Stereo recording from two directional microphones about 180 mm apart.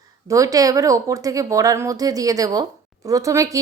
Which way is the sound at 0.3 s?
20° right (ahead or behind).